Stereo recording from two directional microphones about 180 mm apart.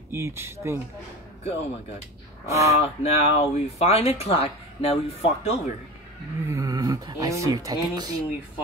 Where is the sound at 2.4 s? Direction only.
15° right (ahead or behind).